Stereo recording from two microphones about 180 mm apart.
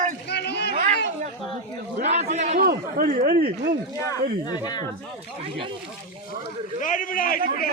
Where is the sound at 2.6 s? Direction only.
55° right (ahead or behind).